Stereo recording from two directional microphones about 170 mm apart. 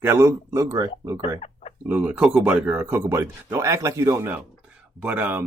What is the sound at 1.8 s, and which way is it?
Speech, 10° right (ahead or behind).